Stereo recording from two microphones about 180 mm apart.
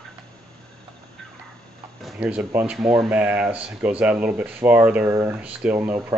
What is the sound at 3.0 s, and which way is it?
Speech, 5° right (ahead or behind).